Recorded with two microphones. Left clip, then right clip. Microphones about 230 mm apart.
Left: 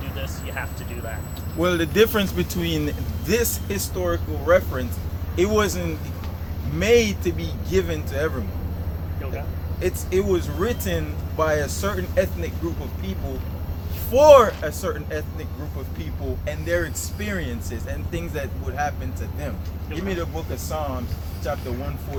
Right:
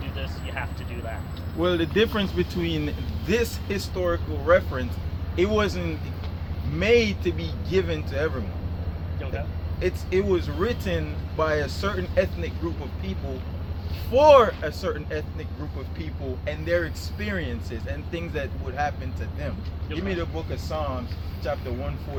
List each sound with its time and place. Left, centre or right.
0.2 s vehicle: centre
1.5 s speech: left
3.2 s speech: centre
9.8 s speech: centre
14.1 s speech: centre
16.5 s speech: centre
20.1 s speech: centre